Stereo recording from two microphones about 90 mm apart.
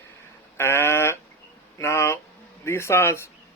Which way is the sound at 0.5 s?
30° left (ahead or behind).